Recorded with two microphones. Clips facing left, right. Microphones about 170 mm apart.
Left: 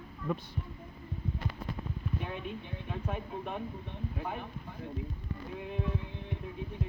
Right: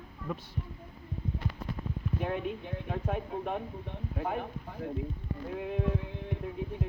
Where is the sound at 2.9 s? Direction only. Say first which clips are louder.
Right 4 dB; 55° right (ahead or behind).